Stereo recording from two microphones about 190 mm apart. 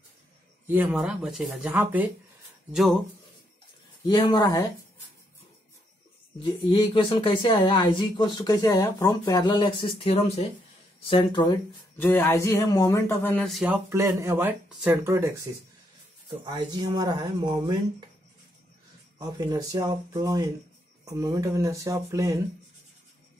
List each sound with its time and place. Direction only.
0.7 s speech: 10° right (ahead or behind)
4.1 s speech: 25° left (ahead or behind)
6.4 s speech: 25° left (ahead or behind)
12.0 s speech: 10° left (ahead or behind)
13.8 s speech: 15° right (ahead or behind)
16.4 s speech: 25° right (ahead or behind)
19.1 s speech: 20° right (ahead or behind)